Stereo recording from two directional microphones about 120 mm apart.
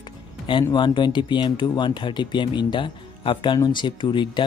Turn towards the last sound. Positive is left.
turn(degrees=40)  # may be behind; listen again after turning